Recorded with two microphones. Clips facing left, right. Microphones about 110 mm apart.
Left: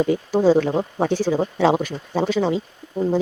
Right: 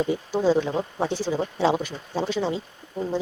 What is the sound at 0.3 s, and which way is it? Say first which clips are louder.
Speech: left 5 dB; 45° left (ahead or behind).